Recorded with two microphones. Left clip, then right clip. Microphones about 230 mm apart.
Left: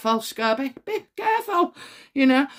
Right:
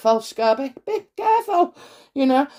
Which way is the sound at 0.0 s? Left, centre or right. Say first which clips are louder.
Right 5 dB; left.